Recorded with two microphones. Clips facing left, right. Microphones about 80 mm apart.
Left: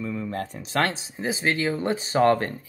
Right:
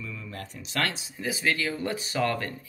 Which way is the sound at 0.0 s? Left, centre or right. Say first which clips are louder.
Left 10 dB; left.